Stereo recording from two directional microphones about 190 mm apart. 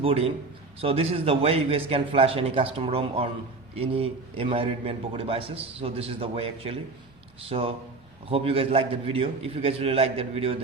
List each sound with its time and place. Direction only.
0.0 s a man's voice: 30° right (ahead or behind)
8.3 s a man's voice: 30° right (ahead or behind)